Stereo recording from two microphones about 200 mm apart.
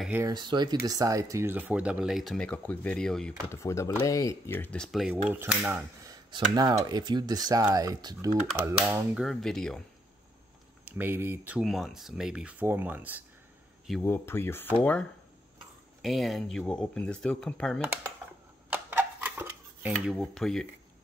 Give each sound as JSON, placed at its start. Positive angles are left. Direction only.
{"t": 0.0, "sound": "speech", "side_deg": -10}
{"t": 0.3, "sound": "speech", "side_deg": -20}
{"t": 3.4, "sound": "speech", "side_deg": 15}
{"t": 9.1, "sound": "speech", "side_deg": 0}
{"t": 10.9, "sound": "speech", "side_deg": -10}
{"t": 13.8, "sound": "speech", "side_deg": 5}
{"t": 18.7, "sound": "cutlery", "side_deg": -10}